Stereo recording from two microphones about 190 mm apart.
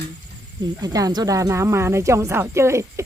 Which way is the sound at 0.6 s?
20° right (ahead or behind).